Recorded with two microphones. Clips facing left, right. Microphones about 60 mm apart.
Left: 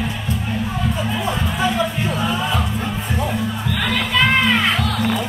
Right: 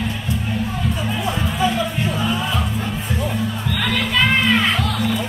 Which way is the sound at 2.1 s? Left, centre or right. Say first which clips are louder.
Left 2 dB; centre.